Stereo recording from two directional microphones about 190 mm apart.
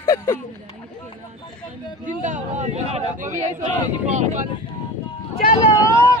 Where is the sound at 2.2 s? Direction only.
40° right (ahead or behind).